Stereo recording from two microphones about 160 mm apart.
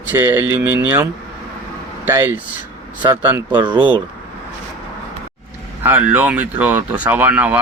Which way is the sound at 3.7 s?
30° right (ahead or behind).